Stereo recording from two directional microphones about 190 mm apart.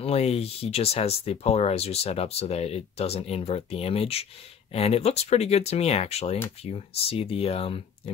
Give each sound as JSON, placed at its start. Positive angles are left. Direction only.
{"t": 0.0, "sound": "speech", "side_deg": 30}